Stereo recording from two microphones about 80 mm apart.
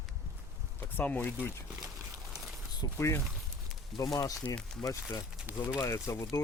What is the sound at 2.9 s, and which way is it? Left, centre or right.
Speech, left.